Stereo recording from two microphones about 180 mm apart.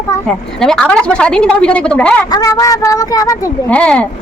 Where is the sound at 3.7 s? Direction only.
5° left (ahead or behind).